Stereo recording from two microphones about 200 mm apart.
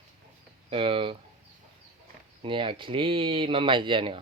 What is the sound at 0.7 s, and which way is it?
Speech, 25° right (ahead or behind).